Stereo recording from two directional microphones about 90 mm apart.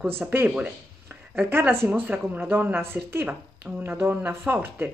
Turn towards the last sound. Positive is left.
turn(degrees=-25)  # may be behind; listen again after turning